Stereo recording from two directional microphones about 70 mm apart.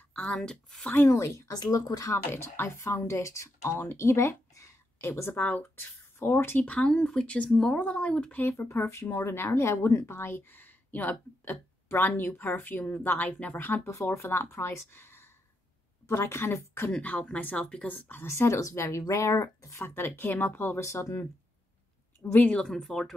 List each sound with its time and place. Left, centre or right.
0.1 s a sound: centre
0.5 s speech: centre
1.0 s speech: left
1.5 s speech: left
2.0 s speech: left
5.4 s speech: left
6.1 s speech: left
6.6 s speech: centre
8.4 s a woman's voice: left
14.0 s speech: left
17.0 s speech: centre
18.2 s speech: left
22.2 s speech: left
22.6 s speech: centre